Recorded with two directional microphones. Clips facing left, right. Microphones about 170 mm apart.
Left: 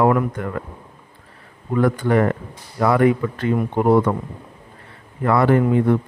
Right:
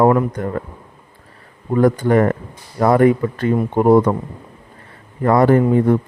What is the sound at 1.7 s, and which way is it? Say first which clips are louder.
Speech: right 4 dB; 40° right (ahead or behind).